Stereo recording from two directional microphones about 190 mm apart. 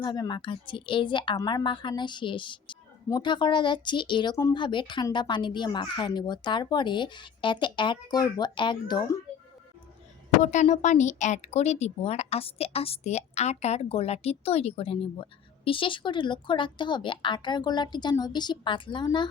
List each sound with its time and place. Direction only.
0.0 s a woman's voice: 25° left (ahead or behind)
10.4 s speech: 40° left (ahead or behind); by 19.3 s 25° left (ahead or behind)